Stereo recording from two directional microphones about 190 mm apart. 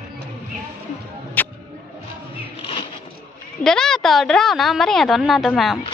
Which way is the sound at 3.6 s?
5° left (ahead or behind).